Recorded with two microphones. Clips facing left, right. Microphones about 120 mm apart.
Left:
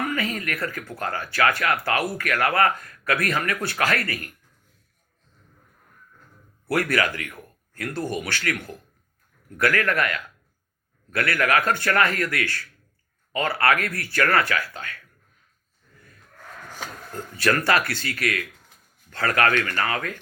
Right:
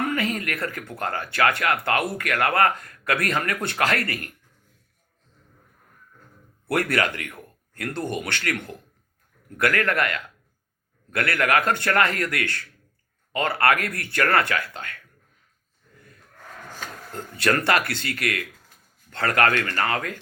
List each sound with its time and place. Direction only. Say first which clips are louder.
0.0 s speech: right 2 dB; 25° right (ahead or behind)
6.7 s speech: even; 25° right (ahead or behind)
17.4 s speech: even; 25° right (ahead or behind)
19.5 s speech: left 1 dB; 15° left (ahead or behind)
19.7 s speech: right 1 dB; 30° right (ahead or behind)